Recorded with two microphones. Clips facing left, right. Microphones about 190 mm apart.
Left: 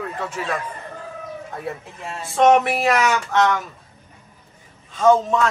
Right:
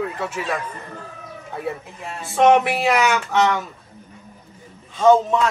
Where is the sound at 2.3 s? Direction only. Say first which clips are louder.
Even; centre (ahead or behind).